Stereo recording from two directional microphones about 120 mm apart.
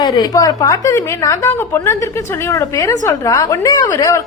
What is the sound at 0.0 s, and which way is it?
A woman's voice, 35° left (ahead or behind).